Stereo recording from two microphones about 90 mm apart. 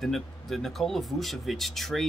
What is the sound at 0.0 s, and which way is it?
Speech, 5° left (ahead or behind).